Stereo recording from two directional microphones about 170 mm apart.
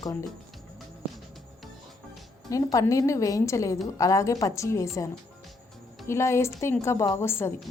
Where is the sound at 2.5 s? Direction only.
20° left (ahead or behind).